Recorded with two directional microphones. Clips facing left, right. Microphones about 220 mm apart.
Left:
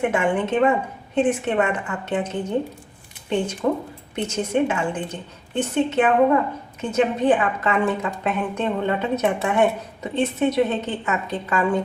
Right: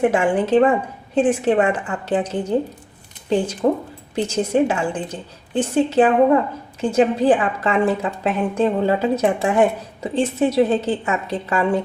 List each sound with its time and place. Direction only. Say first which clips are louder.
0.0 s a woman's voice: right 4 dB; 35° right (ahead or behind)